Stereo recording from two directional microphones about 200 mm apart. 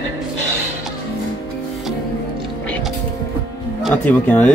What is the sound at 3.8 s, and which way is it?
Speech, 5° left (ahead or behind).